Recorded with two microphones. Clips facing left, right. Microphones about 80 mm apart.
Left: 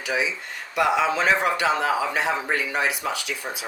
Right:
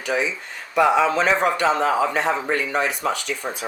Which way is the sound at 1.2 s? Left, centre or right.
Centre.